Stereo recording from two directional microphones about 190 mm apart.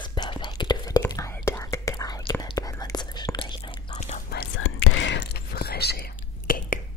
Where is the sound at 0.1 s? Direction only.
25° left (ahead or behind).